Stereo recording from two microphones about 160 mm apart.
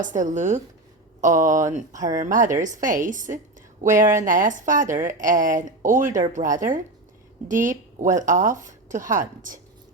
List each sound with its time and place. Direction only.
0.0 s a woman's voice: 50° right (ahead or behind)